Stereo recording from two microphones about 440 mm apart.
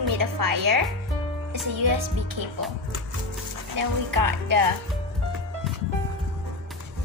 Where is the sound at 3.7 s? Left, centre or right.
Right.